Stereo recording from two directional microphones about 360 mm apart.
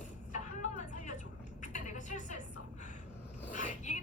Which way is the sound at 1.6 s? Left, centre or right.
Centre.